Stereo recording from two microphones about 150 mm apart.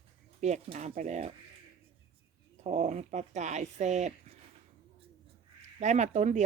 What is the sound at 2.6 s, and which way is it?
Speech, 50° right (ahead or behind).